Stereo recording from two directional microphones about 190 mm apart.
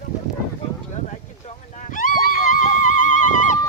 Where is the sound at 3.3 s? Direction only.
40° left (ahead or behind).